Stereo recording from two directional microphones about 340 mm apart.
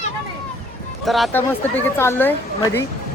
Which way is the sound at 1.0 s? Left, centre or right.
Centre.